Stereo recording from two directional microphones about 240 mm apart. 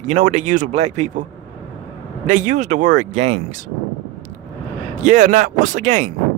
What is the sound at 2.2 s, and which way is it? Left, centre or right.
Speech, right.